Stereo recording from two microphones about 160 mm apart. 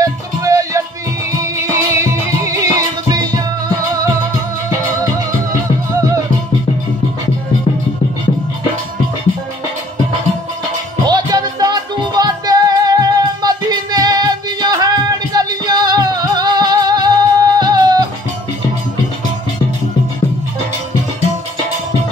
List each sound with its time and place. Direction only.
0.0 s music: 20° right (ahead or behind)
11.1 s music: 25° right (ahead or behind)